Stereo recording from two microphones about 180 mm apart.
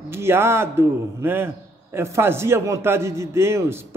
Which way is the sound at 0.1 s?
15° right (ahead or behind).